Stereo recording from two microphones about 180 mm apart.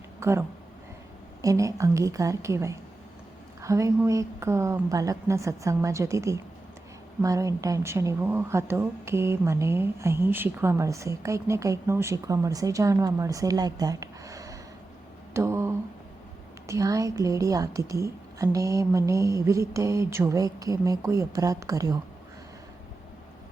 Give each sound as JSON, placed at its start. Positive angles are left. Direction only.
{"t": 0.2, "sound": "a woman's voice", "side_deg": -15}
{"t": 15.3, "sound": "a sound", "side_deg": -15}
{"t": 16.6, "sound": "a woman's voice", "side_deg": -20}